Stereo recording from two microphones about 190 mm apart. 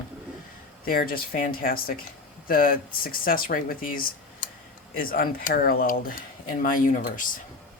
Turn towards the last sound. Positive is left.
turn(degrees=45)  # may be behind; listen again after turning